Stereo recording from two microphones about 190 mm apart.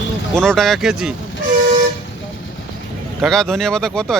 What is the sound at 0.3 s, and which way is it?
Speech, 5° left (ahead or behind).